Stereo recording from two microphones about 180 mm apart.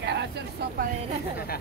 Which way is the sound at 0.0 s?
70° right (ahead or behind).